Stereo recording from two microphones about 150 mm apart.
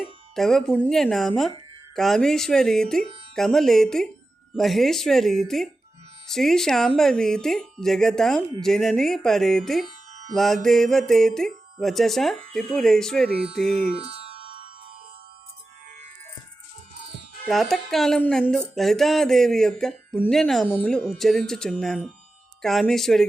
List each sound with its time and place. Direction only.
0.0 s speech: centre (ahead or behind)
13.9 s music: 40° right (ahead or behind)
17.4 s speech: centre (ahead or behind)